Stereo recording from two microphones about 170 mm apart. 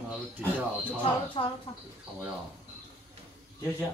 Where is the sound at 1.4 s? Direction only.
35° left (ahead or behind).